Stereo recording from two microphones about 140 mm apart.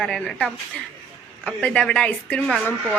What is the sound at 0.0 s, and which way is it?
A woman's voice, 5° left (ahead or behind).